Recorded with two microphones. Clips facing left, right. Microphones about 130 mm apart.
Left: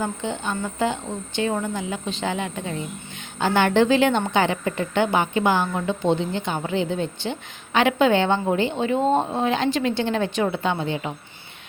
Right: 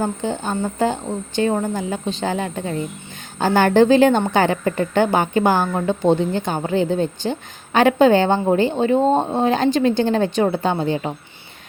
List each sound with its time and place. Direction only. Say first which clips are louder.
0.0 s a woman's voice: right 4 dB; 35° right (ahead or behind)